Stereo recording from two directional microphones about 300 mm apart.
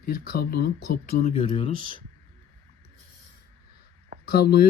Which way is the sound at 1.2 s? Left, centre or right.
Left.